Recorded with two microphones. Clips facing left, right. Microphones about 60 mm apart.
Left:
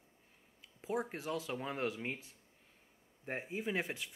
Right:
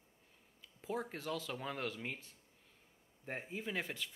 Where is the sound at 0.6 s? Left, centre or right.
Left.